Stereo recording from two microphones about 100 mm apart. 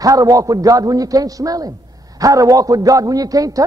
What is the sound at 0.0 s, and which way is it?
A man's voice, 35° right (ahead or behind).